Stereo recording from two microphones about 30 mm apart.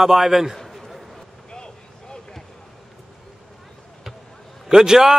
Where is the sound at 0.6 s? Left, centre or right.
Centre.